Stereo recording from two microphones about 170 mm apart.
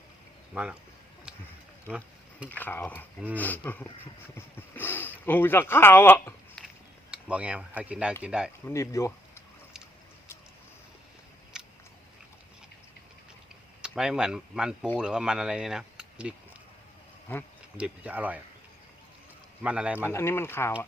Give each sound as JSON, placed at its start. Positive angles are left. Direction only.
{"t": 0.5, "sound": "speech", "side_deg": -5}
{"t": 2.5, "sound": "speech", "side_deg": 10}
{"t": 7.1, "sound": "speech", "side_deg": -5}
{"t": 8.6, "sound": "speech", "side_deg": 15}
{"t": 11.5, "sound": "biting", "side_deg": -5}
{"t": 13.8, "sound": "speech", "side_deg": -5}
{"t": 17.7, "sound": "speech", "side_deg": -5}
{"t": 19.6, "sound": "speech", "side_deg": -5}
{"t": 20.1, "sound": "speech", "side_deg": 15}